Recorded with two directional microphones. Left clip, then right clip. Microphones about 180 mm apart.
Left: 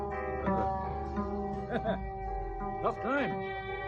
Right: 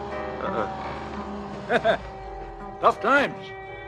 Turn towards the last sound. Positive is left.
turn(degrees=30)  # may be behind; listen again after turning